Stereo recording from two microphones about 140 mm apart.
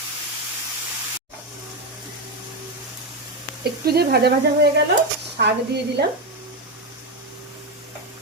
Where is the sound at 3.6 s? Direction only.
90° right.